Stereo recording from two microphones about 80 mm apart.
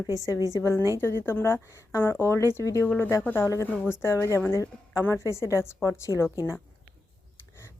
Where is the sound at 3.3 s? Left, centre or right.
Left.